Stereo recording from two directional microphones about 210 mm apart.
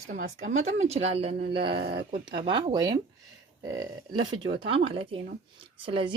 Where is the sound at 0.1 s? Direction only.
35° right (ahead or behind).